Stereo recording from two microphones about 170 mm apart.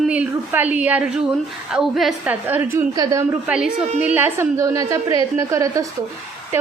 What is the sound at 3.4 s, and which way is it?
A woman's voice, 5° right (ahead or behind).